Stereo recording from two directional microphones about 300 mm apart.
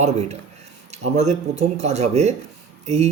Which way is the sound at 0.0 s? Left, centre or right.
Right.